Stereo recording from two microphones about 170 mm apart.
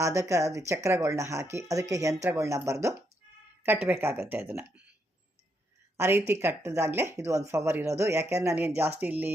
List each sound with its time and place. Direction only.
0.0 s speech: 15° right (ahead or behind)
6.0 s speech: 15° right (ahead or behind)